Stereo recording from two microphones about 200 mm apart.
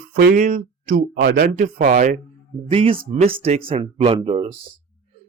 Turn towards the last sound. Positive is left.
turn(degrees=-25)  # may be behind; listen again after turning